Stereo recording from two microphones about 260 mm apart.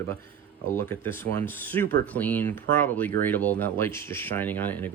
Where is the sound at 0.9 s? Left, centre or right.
Centre.